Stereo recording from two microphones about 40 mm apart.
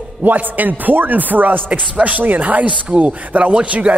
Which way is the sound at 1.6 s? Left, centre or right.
Right.